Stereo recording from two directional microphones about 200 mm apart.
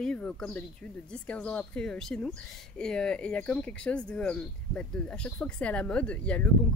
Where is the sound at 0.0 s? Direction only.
5° left (ahead or behind).